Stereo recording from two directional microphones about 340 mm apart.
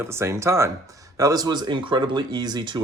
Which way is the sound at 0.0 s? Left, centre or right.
Centre.